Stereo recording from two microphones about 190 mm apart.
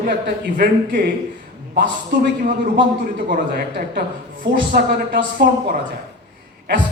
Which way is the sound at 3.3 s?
50° right (ahead or behind).